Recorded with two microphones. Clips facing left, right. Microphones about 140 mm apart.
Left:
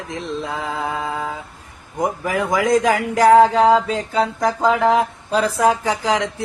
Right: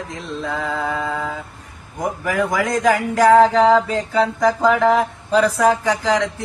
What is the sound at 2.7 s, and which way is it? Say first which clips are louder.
Mantra: right 1 dB; 15° left (ahead or behind).